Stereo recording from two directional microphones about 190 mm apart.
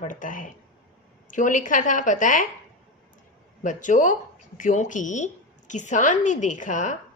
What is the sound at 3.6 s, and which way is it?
Speech, 40° left (ahead or behind).